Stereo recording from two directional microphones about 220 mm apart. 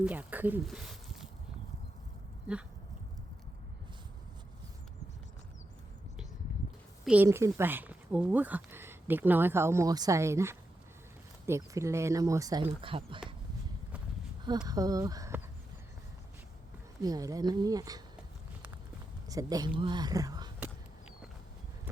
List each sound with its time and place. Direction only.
0.0 s speech: 10° right (ahead or behind)
7.0 s speech: 5° right (ahead or behind); by 13.3 s 25° right (ahead or behind)
14.7 s speech: 15° right (ahead or behind)
17.0 s speech: 15° right (ahead or behind)
19.3 s speech: 15° right (ahead or behind)